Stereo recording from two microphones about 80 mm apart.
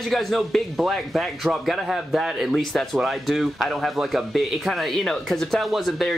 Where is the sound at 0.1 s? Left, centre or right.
Centre.